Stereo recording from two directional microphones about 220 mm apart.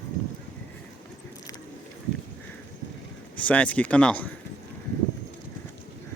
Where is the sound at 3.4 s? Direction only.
5° left (ahead or behind).